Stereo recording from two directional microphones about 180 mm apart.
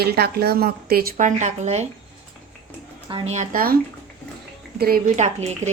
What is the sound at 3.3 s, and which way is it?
A woman's voice, 45° right (ahead or behind).